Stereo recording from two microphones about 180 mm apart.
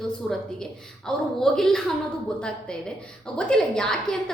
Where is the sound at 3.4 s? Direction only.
5° left (ahead or behind).